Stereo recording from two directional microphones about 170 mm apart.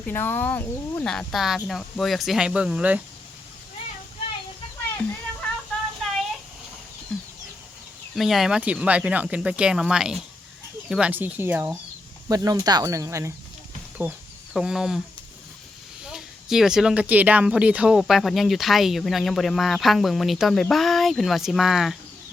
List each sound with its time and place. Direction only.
0.1 s speech: 10° left (ahead or behind); by 3.0 s 5° right (ahead or behind)
7.1 s chicken: 5° left (ahead or behind)
8.1 s speech: centre (ahead or behind); by 13.3 s 15° right (ahead or behind)
14.0 s speech: 5° right (ahead or behind)
16.0 s speech: 5° right (ahead or behind)